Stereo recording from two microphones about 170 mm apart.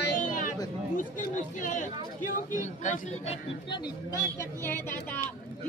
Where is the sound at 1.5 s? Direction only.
50° left (ahead or behind).